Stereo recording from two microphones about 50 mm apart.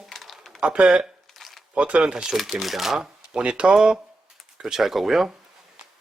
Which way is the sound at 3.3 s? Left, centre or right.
Centre.